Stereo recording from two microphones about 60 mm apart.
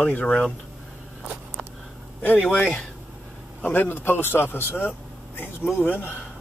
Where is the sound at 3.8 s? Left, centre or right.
Left.